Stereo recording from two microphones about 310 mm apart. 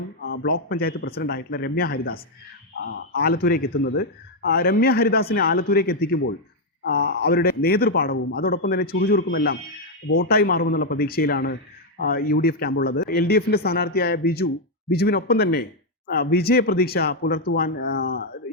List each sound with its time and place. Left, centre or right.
0.2 s a man's voice: left